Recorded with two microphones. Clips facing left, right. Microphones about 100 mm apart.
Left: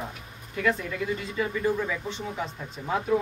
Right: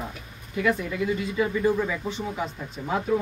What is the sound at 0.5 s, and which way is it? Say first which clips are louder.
Speech: right 2 dB; 10° right (ahead or behind).